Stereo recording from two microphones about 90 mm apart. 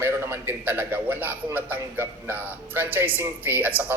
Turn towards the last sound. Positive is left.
turn(degrees=-20)  # may be behind; listen again after turning